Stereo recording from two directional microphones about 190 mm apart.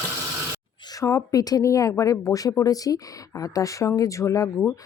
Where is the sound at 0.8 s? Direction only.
20° left (ahead or behind).